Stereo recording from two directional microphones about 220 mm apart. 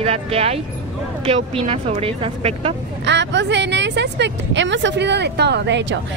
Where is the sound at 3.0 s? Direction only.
50° right (ahead or behind).